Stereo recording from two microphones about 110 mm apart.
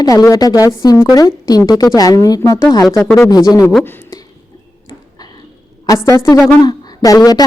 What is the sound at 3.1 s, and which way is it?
Speech, 30° left (ahead or behind).